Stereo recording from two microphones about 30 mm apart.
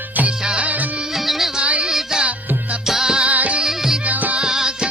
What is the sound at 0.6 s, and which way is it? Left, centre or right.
Music, right.